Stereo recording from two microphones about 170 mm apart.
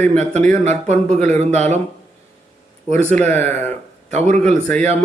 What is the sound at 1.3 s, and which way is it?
Speech, 40° right (ahead or behind).